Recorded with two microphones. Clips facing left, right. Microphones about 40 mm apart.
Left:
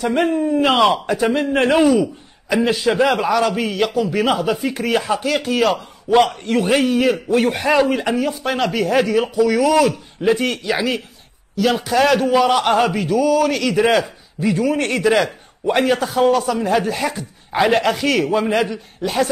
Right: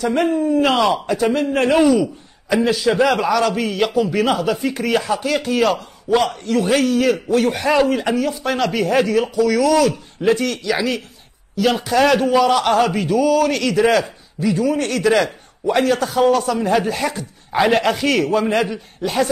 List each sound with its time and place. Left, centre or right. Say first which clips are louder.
0.1 s a man's voice: even; centre
6.0 s a man's voice: left 3 dB; left
6.7 s a man's voice: even; centre
10.4 s speech: even; left
11.5 s a man's voice: even; centre
12.4 s a man's voice: even; centre
12.9 s a man's voice: even; centre
14.4 s a man's voice: even; left
15.0 s a man's voice: right 1 dB; centre
16.1 s a man's voice: even; centre